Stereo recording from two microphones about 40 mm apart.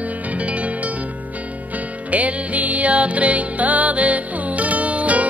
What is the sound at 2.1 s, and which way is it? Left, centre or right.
Music, right.